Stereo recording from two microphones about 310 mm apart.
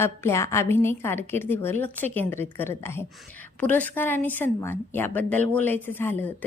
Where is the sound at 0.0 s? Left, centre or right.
Centre.